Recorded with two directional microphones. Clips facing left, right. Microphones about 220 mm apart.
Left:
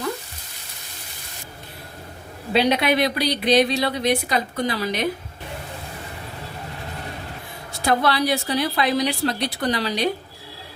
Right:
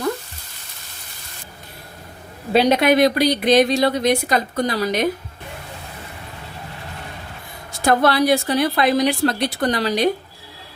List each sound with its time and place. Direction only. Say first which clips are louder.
2.5 s speech: right 4 dB; 45° right (ahead or behind)
7.9 s speech: right 4 dB; 50° right (ahead or behind)